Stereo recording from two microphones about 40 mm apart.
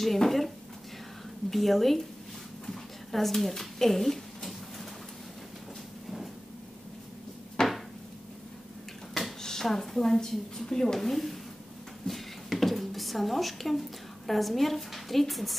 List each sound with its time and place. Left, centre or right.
0.0 s speech: centre
1.5 s speech: centre
2.6 s a sound: centre
7.6 s a sound: centre
9.4 s a woman's voice: centre
11.0 s speech: centre